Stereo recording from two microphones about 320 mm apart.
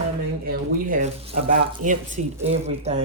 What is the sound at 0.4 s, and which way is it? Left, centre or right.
Speech, right.